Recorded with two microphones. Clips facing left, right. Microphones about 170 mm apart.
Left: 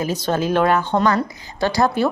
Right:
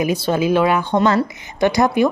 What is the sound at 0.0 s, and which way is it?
Speech, 10° right (ahead or behind).